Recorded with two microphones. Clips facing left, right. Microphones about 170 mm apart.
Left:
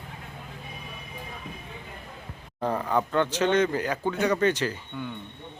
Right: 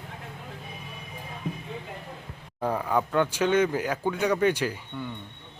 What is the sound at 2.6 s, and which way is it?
Speech, 5° right (ahead or behind).